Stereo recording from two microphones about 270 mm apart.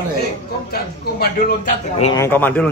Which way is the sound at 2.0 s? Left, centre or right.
Centre.